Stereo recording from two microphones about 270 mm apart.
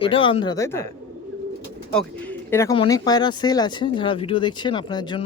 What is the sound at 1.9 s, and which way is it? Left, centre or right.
Speech, centre.